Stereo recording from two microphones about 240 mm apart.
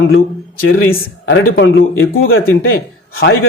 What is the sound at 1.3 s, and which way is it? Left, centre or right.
A man's voice, left.